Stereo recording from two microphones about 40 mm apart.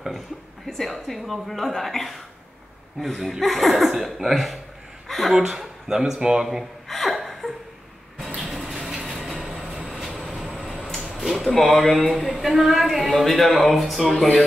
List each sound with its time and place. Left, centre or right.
0.7 s speech: centre
5.0 s a sound: centre
5.3 s speech: centre
6.9 s laughter: centre
7.4 s a sound: left
8.5 s bird: centre
8.7 s mechanisms: centre
9.4 s train: centre
10.6 s a sound: centre
11.7 s speech: centre